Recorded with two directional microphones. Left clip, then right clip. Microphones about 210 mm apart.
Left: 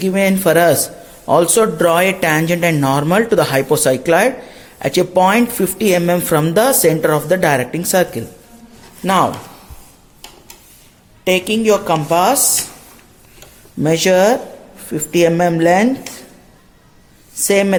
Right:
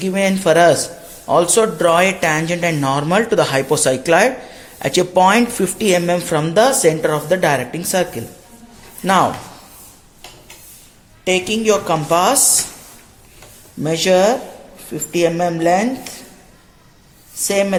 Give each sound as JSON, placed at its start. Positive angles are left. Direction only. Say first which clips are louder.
{"t": 0.0, "sound": "a man's voice", "louder": "left 2 dB", "side_deg": 20}
{"t": 9.0, "sound": "speech", "louder": "even", "side_deg": 10}
{"t": 11.3, "sound": "a man's voice", "louder": "left 2 dB", "side_deg": 25}
{"t": 12.0, "sound": "speech", "louder": "right 1 dB", "side_deg": 10}
{"t": 13.8, "sound": "a man's voice", "louder": "left 2 dB", "side_deg": 30}
{"t": 17.4, "sound": "speech", "louder": "left 3 dB", "side_deg": 30}